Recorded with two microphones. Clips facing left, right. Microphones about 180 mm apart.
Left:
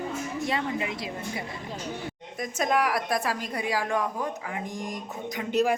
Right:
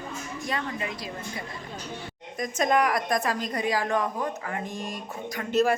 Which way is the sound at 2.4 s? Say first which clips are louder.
Right 2 dB; 5° left (ahead or behind).